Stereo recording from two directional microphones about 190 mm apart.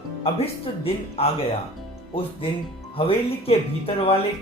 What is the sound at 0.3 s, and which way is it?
Speech, 30° left (ahead or behind).